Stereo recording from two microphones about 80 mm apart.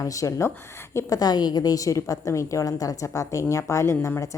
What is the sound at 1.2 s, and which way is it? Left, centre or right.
A woman's voice, left.